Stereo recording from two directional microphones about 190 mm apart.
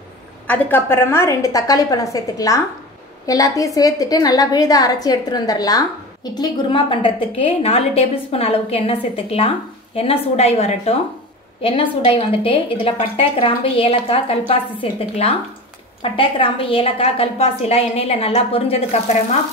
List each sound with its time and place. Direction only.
0.5 s a woman's voice: 10° left (ahead or behind); by 18.8 s 30° left (ahead or behind)